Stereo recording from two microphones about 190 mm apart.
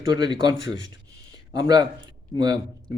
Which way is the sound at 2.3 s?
20° right (ahead or behind).